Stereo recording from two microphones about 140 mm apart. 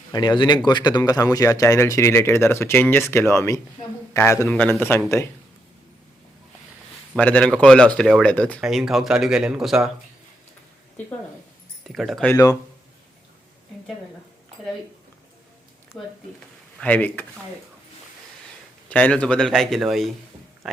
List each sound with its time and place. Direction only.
0.1 s speech: 30° left (ahead or behind)
7.2 s speech: 10° left (ahead or behind)
8.6 s speech: 5° right (ahead or behind)
11.9 s speech: centre (ahead or behind)
15.9 s speech: 5° left (ahead or behind)
18.9 s speech: 10° left (ahead or behind)